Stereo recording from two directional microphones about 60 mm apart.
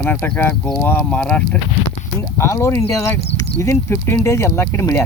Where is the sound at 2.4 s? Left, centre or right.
Left.